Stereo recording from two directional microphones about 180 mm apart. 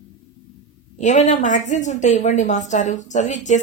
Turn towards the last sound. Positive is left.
turn(degrees=40)  # may be behind; listen again after turning